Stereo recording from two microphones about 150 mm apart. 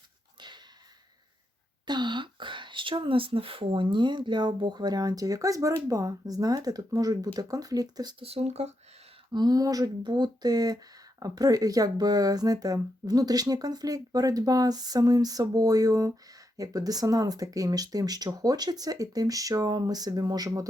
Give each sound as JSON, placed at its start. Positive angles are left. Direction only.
{"t": 0.3, "sound": "a sound", "side_deg": -30}
{"t": 1.9, "sound": "speech", "side_deg": -30}
{"t": 8.2, "sound": "speech", "side_deg": -40}
{"t": 9.3, "sound": "speech", "side_deg": -25}